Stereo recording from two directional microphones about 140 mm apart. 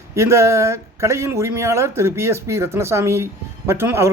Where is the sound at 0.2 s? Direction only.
20° right (ahead or behind).